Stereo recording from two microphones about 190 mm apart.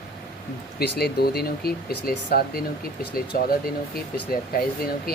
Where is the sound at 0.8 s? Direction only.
55° left (ahead or behind).